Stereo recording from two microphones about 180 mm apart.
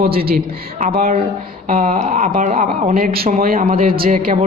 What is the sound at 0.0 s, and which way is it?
A man's voice, 55° right (ahead or behind).